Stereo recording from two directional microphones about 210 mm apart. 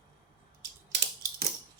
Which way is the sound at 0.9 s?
50° right (ahead or behind).